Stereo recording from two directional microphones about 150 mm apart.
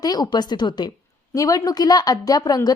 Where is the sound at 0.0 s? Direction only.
25° left (ahead or behind).